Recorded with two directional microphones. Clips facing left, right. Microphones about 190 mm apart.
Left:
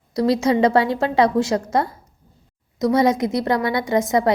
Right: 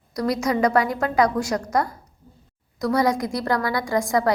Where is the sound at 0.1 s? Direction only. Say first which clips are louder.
Left 5 dB; 25° left (ahead or behind).